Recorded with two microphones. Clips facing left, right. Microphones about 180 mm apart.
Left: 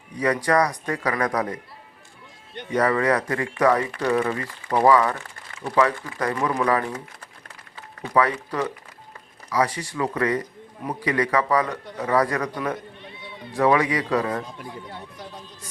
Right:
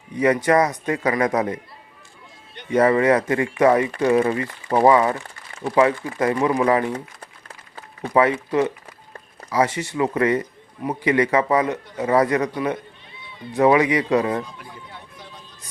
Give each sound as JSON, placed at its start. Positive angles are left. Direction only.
{"t": 0.2, "sound": "speech", "side_deg": -20}
{"t": 2.7, "sound": "speech", "side_deg": -25}
{"t": 8.1, "sound": "speech", "side_deg": -25}
{"t": 13.5, "sound": "speech", "side_deg": -20}